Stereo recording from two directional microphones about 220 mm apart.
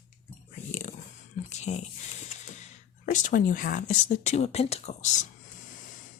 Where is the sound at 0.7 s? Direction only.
35° left (ahead or behind).